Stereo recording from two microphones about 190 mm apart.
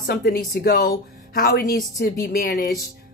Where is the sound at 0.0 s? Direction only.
50° left (ahead or behind).